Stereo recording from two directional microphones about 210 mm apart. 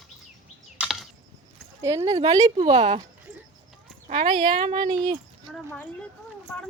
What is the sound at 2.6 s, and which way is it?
Speech, 30° right (ahead or behind).